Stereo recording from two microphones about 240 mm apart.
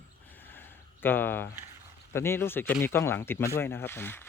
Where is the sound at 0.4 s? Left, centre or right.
Centre.